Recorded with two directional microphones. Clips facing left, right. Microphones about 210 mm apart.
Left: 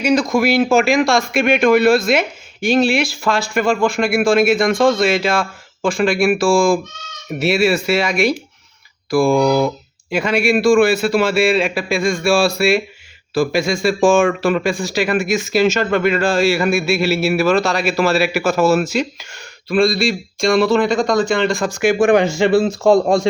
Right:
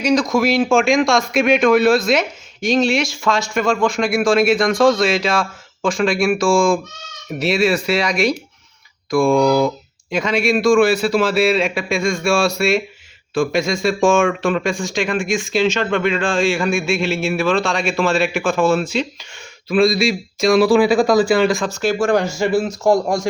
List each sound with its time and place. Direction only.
0.0 s a man's voice: centre (ahead or behind)
21.7 s speech: 15° left (ahead or behind)
22.4 s a man's voice: 30° left (ahead or behind)